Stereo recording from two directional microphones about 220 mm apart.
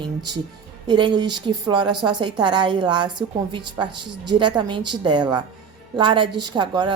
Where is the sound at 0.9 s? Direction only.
20° right (ahead or behind).